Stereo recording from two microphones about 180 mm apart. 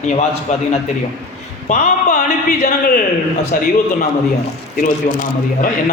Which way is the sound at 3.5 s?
50° left (ahead or behind).